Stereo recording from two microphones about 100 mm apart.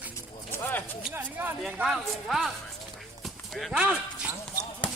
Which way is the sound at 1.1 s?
20° right (ahead or behind).